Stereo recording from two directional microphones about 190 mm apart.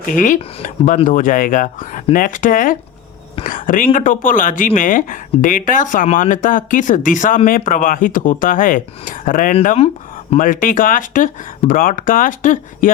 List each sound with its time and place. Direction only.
0.2 s speech: 45° left (ahead or behind)
9.6 s speech: 35° left (ahead or behind)
10.3 s speech: 45° left (ahead or behind)